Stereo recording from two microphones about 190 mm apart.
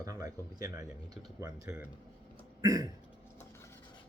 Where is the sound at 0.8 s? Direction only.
15° right (ahead or behind).